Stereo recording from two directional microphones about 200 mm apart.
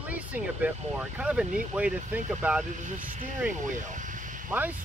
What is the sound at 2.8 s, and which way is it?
Speech, 40° right (ahead or behind).